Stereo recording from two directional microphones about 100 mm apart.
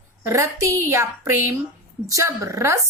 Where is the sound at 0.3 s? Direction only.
30° right (ahead or behind).